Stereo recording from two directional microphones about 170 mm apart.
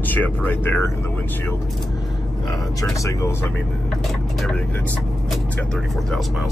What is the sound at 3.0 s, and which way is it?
Speech, 15° left (ahead or behind).